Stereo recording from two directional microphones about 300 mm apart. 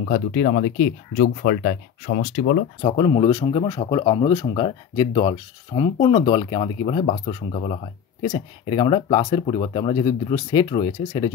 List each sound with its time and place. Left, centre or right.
0.1 s speech: left
2.8 s speech: centre